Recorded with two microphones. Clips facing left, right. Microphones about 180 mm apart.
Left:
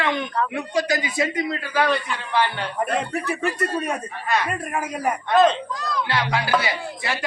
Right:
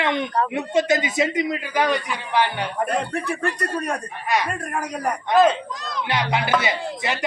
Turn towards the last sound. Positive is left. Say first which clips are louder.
# right 2 dB
turn(degrees=-20)  # may be behind; listen again after turning